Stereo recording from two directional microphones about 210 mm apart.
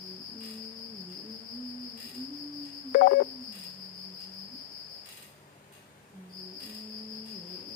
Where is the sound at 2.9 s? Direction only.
40° left (ahead or behind).